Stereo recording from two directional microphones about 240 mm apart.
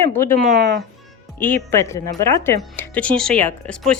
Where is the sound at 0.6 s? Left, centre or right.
Right.